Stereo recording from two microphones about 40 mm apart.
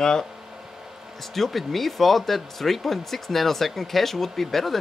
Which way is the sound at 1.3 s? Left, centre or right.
Centre.